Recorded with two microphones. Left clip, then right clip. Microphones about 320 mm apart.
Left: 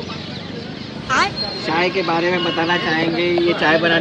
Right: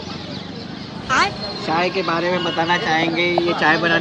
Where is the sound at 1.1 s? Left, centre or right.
Centre.